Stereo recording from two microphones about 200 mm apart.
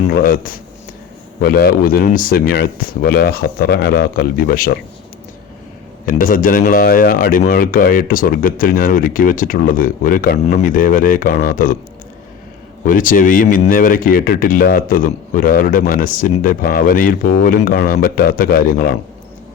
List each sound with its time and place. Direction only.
0.1 s speech: 45° left (ahead or behind)
6.1 s speech: 45° left (ahead or behind)
12.8 s speech: 40° left (ahead or behind)